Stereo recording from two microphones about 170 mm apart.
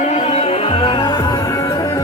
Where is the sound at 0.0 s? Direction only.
40° left (ahead or behind).